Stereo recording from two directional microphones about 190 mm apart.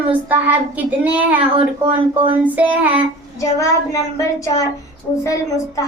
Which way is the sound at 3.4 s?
15° left (ahead or behind).